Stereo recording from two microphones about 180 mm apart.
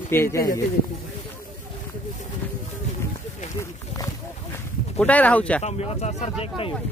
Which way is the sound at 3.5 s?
20° left (ahead or behind).